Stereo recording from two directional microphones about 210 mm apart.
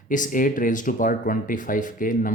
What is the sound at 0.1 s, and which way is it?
Speech, 40° left (ahead or behind).